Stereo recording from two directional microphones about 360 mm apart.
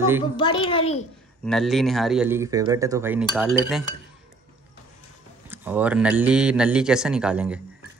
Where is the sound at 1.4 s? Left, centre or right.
Centre.